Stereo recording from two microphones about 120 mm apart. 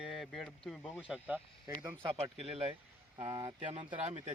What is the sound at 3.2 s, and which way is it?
Speech, 35° right (ahead or behind).